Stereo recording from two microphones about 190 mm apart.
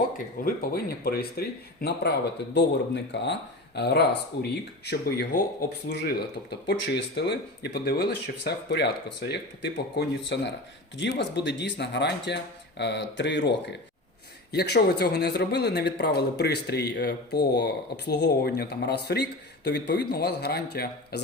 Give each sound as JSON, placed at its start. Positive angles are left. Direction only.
{"t": 0.4, "sound": "a man's voice", "side_deg": 55}
{"t": 14.5, "sound": "a man's voice", "side_deg": 60}